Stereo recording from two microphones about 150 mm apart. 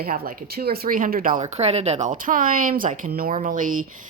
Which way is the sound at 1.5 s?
45° right (ahead or behind).